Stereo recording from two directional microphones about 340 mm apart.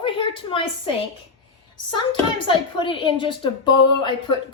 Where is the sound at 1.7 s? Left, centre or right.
Centre.